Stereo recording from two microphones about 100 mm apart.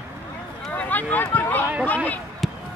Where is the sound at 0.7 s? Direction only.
15° left (ahead or behind).